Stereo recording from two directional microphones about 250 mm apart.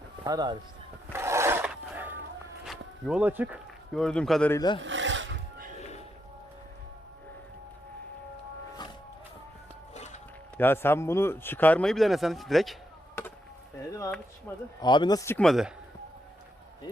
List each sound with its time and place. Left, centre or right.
0.3 s speech: centre
1.1 s a sound: centre
2.6 s speech: centre
4.8 s a sound: right
9.9 s music: left
10.6 s a man's voice: centre
13.9 s a man's voice: centre